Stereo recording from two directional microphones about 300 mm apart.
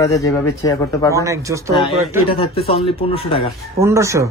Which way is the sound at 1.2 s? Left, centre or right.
Centre.